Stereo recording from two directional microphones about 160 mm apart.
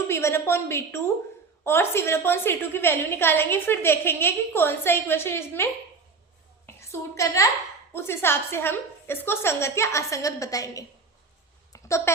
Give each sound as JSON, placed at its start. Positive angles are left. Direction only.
{"t": 0.1, "sound": "a woman's voice", "side_deg": 15}
{"t": 7.2, "sound": "a woman's voice", "side_deg": 20}
{"t": 11.7, "sound": "a sound", "side_deg": 20}